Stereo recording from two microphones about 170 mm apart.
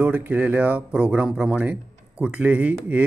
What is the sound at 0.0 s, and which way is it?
Speech, 10° right (ahead or behind).